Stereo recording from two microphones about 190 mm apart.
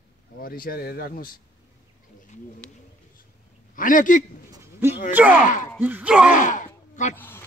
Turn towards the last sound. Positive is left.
turn(degrees=10)  # may be behind; listen again after turning